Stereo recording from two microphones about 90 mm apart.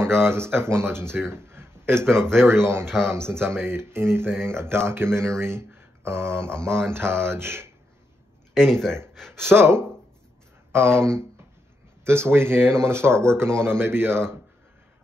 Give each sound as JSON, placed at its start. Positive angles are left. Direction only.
{"t": 0.0, "sound": "speech", "side_deg": -25}
{"t": 5.7, "sound": "a sound", "side_deg": -25}
{"t": 6.4, "sound": "speech", "side_deg": -30}
{"t": 8.5, "sound": "speech", "side_deg": 5}
{"t": 9.1, "sound": "a sound", "side_deg": 5}
{"t": 9.5, "sound": "speech", "side_deg": -30}